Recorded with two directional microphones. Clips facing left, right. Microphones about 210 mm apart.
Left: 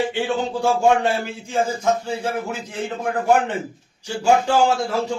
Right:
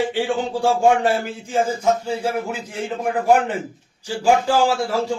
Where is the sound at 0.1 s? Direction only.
30° right (ahead or behind).